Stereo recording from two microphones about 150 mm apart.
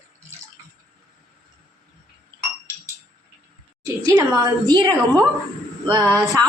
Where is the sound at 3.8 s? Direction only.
20° right (ahead or behind).